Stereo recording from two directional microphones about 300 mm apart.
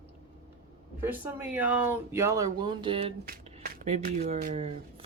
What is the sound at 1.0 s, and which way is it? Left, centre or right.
Speech, centre.